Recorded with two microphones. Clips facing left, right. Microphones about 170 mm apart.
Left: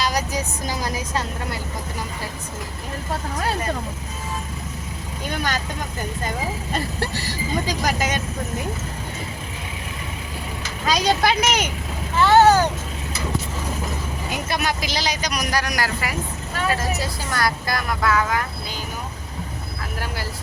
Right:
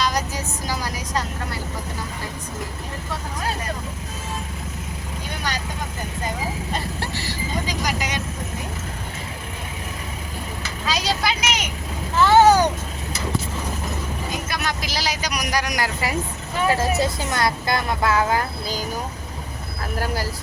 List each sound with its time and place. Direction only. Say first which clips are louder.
0.0 s vehicle: left 1 dB; 10° left (ahead or behind)
7.9 s vehicle: left 3 dB; 50° left (ahead or behind)
10.8 s vehicle: left 4 dB; 50° left (ahead or behind)
12.1 s vehicle: even; 5° right (ahead or behind)
14.6 s vehicle: left 3 dB; 10° left (ahead or behind)
14.8 s a sound: left 1 dB; 5° right (ahead or behind); by 16.1 s 25° right (ahead or behind)
16.6 s vehicle: right 4 dB; 25° right (ahead or behind)